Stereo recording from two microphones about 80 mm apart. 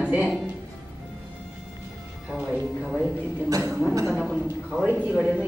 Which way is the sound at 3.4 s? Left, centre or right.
Right.